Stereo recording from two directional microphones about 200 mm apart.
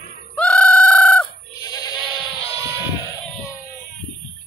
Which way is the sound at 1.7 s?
20° left (ahead or behind).